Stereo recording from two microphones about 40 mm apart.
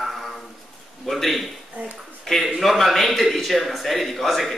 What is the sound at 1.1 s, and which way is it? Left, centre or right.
Speech, centre.